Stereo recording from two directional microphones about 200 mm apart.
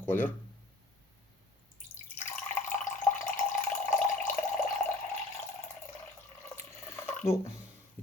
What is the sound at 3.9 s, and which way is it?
Water, 40° left (ahead or behind).